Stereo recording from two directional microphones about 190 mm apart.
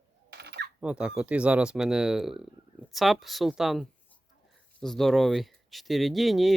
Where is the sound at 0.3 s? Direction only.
60° right (ahead or behind).